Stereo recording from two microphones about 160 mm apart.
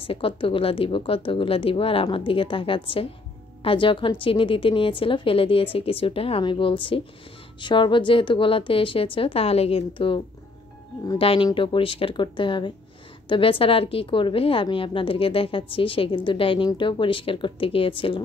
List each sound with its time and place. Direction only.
0.0 s a woman's voice: 35° left (ahead or behind)